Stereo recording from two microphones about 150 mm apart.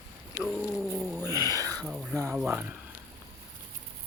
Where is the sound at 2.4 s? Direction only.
10° right (ahead or behind).